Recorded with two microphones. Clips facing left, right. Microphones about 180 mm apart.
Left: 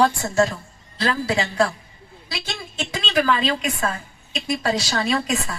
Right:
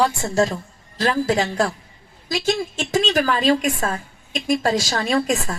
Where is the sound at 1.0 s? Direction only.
45° right (ahead or behind).